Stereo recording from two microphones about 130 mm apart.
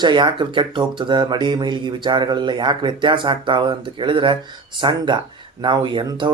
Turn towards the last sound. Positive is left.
turn(degrees=-35)  # may be behind; listen again after turning